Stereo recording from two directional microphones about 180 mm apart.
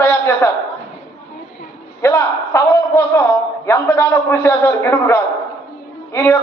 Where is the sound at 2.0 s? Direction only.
15° left (ahead or behind).